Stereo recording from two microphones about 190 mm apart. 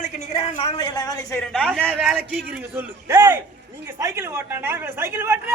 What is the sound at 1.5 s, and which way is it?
Speech, 5° left (ahead or behind).